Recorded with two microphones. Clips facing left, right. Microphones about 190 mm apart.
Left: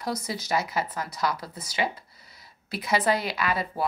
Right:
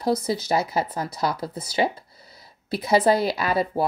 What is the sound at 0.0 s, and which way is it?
Speech, 30° right (ahead or behind).